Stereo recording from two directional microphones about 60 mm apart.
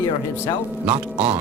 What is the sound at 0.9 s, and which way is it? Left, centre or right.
Music, right.